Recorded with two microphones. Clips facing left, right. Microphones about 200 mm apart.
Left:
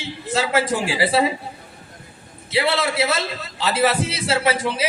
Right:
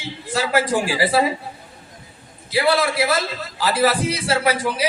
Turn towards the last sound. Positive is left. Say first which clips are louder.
# even
turn(degrees=25)  # may be behind; listen again after turning